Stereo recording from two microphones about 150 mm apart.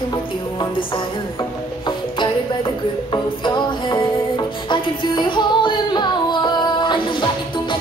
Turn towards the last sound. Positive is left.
turn(degrees=30)  # may be behind; listen again after turning